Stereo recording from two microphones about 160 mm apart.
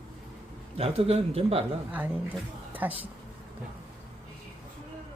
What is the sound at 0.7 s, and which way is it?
Speech, 40° right (ahead or behind).